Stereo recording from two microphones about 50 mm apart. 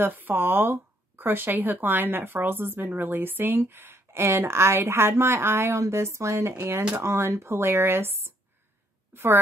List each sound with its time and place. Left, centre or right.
0.0 s a woman's voice: right